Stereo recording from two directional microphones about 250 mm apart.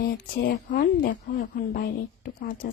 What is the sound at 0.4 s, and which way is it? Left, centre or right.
Speech, left.